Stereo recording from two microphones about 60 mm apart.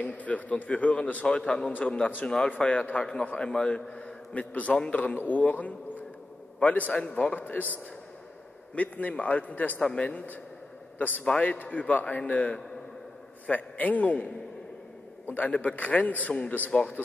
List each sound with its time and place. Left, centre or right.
0.0 s a man's voice: left
2.2 s a man's voice: centre
5.1 s a man's voice: left
7.3 s a man's voice: left
8.7 s a man's voice: left
9.8 s a man's voice: centre
10.0 s a man's voice: left